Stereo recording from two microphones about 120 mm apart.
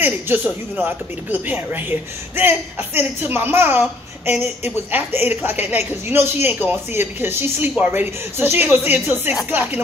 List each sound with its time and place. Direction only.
0.0 s a woman's voice: 15° right (ahead or behind)